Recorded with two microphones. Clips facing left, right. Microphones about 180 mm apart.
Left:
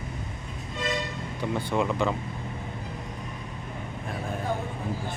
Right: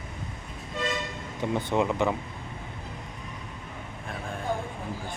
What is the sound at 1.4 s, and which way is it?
Speech, 20° right (ahead or behind).